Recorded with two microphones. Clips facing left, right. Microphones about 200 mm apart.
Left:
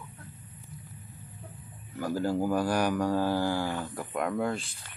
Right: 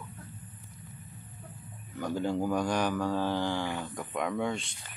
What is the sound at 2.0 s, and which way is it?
Speech, 5° left (ahead or behind).